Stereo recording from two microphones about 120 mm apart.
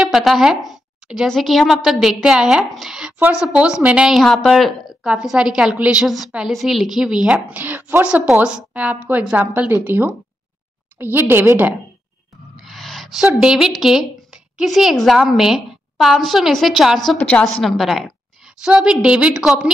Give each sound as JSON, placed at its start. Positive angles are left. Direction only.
{"t": 0.0, "sound": "a woman's voice", "side_deg": 0}
{"t": 3.2, "sound": "a woman's voice", "side_deg": -15}
{"t": 12.5, "sound": "a woman's voice", "side_deg": 0}
{"t": 17.2, "sound": "a woman's voice", "side_deg": 10}
{"t": 17.5, "sound": "a woman's voice", "side_deg": 0}